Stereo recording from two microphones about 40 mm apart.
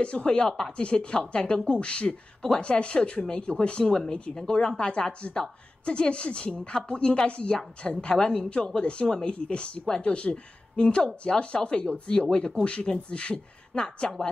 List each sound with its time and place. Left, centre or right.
0.0 s a woman's voice: left
0.7 s a woman's voice: left
3.8 s speech: centre
4.1 s a woman's voice: left
8.5 s a woman's voice: left